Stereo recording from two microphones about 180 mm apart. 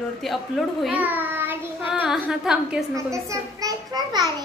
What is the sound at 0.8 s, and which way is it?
Child singing, 10° right (ahead or behind).